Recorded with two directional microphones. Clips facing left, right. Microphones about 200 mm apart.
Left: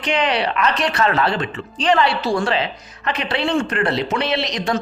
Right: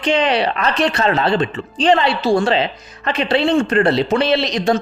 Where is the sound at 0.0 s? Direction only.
25° right (ahead or behind).